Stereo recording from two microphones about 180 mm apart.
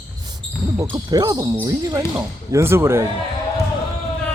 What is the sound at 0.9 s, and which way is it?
Speech, 20° right (ahead or behind).